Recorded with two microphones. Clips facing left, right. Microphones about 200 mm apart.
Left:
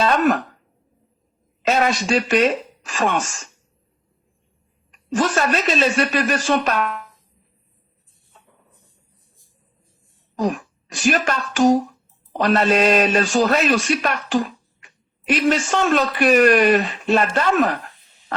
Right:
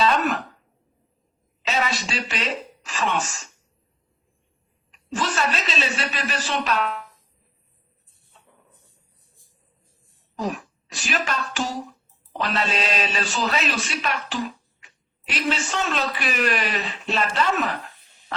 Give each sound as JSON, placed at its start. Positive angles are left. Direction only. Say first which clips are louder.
{"t": 1.6, "sound": "speech", "louder": "left 7 dB", "side_deg": 50}
{"t": 4.9, "sound": "a man's voice", "louder": "left 7 dB", "side_deg": 50}
{"t": 10.3, "sound": "a man's voice", "louder": "left 6 dB", "side_deg": 50}